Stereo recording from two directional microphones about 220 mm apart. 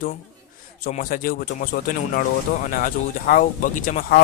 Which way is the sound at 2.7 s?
40° left (ahead or behind).